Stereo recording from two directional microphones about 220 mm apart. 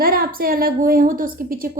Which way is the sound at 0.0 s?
40° right (ahead or behind).